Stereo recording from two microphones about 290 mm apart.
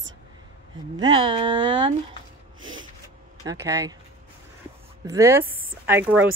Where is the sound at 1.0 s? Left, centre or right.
Centre.